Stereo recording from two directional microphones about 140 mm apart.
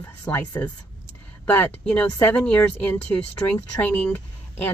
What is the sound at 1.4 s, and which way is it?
A woman's voice, 10° left (ahead or behind).